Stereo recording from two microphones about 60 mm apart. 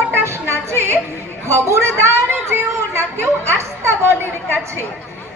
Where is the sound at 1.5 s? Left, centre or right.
Right.